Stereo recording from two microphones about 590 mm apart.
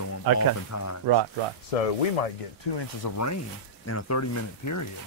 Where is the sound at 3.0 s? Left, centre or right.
Left.